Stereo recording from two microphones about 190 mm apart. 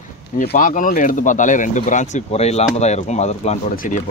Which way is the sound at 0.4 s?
45° left (ahead or behind).